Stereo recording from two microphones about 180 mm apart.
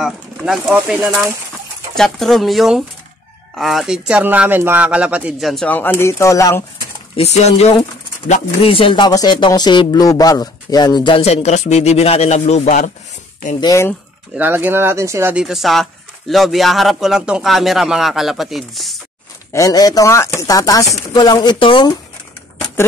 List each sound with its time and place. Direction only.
0.0 s speech: centre (ahead or behind); by 6.6 s 15° left (ahead or behind)
7.2 s speech: 35° left (ahead or behind)
13.6 s speech: 15° left (ahead or behind)
14.3 s speech: 10° right (ahead or behind)
19.5 s speech: 20° left (ahead or behind)